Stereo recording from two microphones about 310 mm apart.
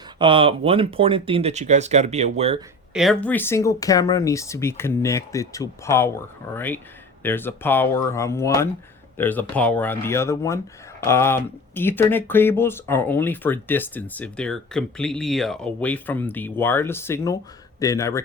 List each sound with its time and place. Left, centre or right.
0.2 s speech: centre
2.9 s speech: centre